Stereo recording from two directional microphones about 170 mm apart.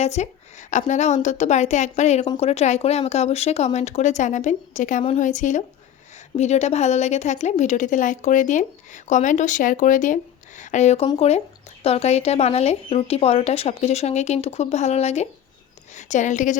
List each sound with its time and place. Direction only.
0.0 s a woman's voice: 40° left (ahead or behind)